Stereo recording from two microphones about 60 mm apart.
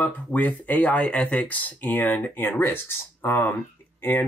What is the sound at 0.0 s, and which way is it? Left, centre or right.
Speech, left.